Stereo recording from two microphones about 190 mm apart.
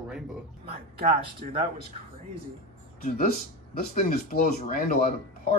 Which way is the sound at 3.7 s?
50° left (ahead or behind).